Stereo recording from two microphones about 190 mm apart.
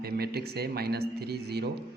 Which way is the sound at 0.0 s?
55° right (ahead or behind).